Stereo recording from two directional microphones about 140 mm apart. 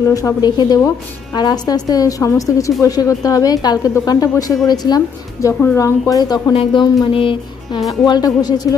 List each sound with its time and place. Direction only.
0.0 s a woman's voice: 25° left (ahead or behind)
6.5 s a woman's voice: 45° left (ahead or behind)
8.0 s a woman's voice: 30° left (ahead or behind)